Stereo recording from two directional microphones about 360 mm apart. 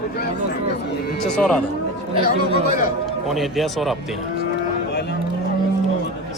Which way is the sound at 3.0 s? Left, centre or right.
Centre.